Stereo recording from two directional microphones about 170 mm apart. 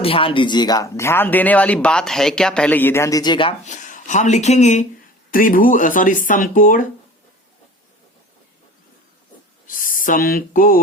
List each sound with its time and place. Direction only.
0.0 s speech: 30° left (ahead or behind)
3.6 s speech: 45° left (ahead or behind)
9.6 s a sound: 55° left (ahead or behind)